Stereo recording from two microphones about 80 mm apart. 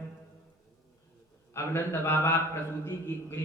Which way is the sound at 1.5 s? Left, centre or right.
Left.